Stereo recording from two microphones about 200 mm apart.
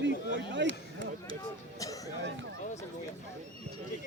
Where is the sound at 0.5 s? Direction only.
65° right (ahead or behind).